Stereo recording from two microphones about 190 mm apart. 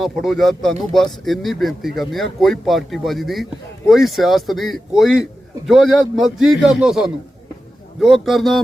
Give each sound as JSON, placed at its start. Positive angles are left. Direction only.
{"t": 0.0, "sound": "speech", "side_deg": 0}